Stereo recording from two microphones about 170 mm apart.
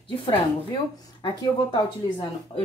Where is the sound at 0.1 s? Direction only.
30° left (ahead or behind).